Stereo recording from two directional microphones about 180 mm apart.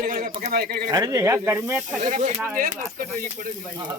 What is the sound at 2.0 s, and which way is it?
Speech, 45° right (ahead or behind).